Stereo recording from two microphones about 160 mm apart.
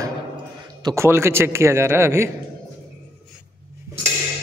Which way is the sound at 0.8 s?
15° right (ahead or behind).